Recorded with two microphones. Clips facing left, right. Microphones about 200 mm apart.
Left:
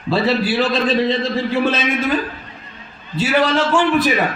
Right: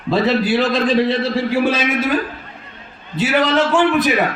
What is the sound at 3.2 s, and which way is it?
Speech, 20° right (ahead or behind).